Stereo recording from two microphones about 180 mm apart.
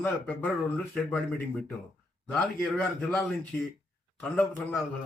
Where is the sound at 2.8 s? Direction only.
5° left (ahead or behind).